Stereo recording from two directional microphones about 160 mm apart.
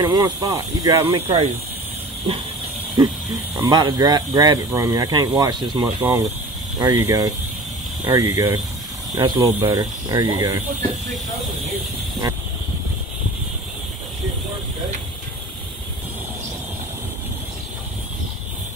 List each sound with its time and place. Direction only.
0.0 s speech: 25° right (ahead or behind)
1.1 s speech: 35° right (ahead or behind)
3.0 s speech: 20° right (ahead or behind)